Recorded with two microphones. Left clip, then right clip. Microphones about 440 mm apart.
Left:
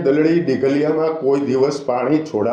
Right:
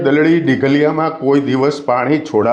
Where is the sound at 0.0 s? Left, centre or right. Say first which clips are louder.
Right 3 dB; right.